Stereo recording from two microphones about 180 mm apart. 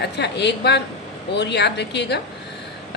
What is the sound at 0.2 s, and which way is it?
Speech, 70° left (ahead or behind).